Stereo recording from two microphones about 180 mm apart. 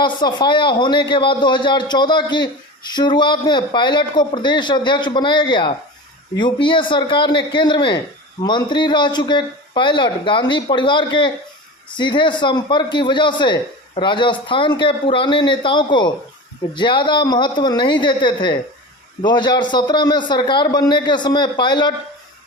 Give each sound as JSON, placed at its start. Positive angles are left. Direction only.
{"t": 0.0, "sound": "a man's voice", "side_deg": 25}